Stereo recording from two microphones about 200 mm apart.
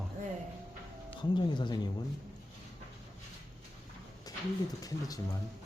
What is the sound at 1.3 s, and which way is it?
Speech, 25° left (ahead or behind).